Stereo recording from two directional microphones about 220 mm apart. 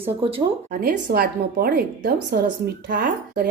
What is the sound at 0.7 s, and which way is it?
A woman's voice, 40° right (ahead or behind).